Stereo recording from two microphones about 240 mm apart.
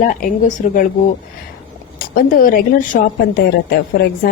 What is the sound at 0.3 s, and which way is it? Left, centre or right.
Speech, left.